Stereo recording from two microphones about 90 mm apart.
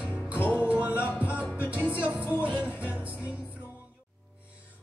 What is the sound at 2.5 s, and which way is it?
Music, 15° right (ahead or behind).